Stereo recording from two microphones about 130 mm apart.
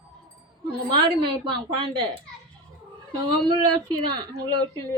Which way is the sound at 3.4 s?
35° right (ahead or behind).